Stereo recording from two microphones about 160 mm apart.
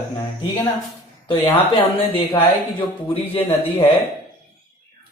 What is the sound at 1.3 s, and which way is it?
Speech, 35° left (ahead or behind).